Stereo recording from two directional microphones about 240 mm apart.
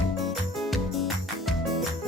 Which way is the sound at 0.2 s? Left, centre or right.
Centre.